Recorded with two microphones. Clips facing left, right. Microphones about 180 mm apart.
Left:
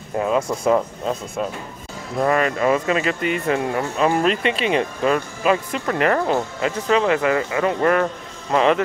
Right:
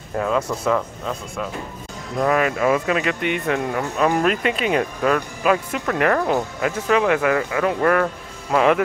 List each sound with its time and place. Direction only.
0.2 s speech: 15° left (ahead or behind)
0.7 s speech: 25° left (ahead or behind)
2.1 s speech: centre (ahead or behind)
8.5 s speech: 5° right (ahead or behind)